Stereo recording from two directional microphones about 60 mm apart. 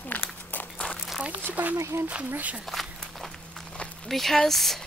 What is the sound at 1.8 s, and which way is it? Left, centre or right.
Speech, right.